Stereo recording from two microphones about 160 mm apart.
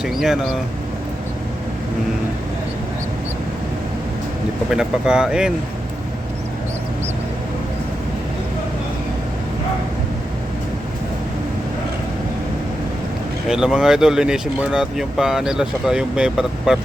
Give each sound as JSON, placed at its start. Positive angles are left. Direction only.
{"t": 0.0, "sound": "speech", "side_deg": 0}
{"t": 4.7, "sound": "speech", "side_deg": -5}
{"t": 13.5, "sound": "speech", "side_deg": -5}